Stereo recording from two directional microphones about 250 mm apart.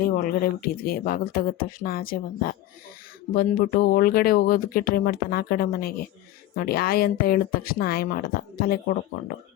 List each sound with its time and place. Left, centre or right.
0.0 s speech: left